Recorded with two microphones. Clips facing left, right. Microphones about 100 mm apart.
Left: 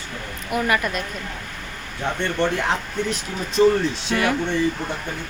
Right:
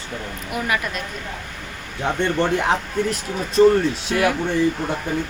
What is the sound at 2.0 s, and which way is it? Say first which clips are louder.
Speech: right 2 dB; 10° right (ahead or behind).